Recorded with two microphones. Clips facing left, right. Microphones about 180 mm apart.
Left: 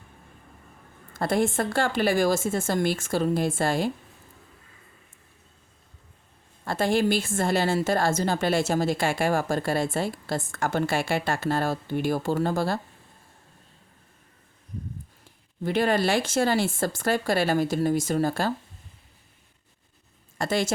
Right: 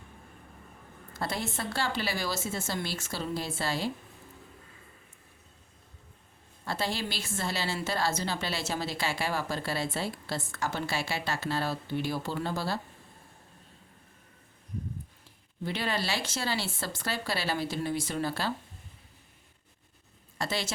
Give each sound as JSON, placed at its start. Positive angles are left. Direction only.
{"t": 1.1, "sound": "a woman's voice", "side_deg": 50}
{"t": 6.7, "sound": "a woman's voice", "side_deg": 50}
{"t": 15.6, "sound": "a woman's voice", "side_deg": 50}
{"t": 20.4, "sound": "a woman's voice", "side_deg": 50}